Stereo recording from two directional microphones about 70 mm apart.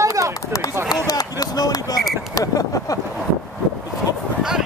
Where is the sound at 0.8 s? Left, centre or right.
Left.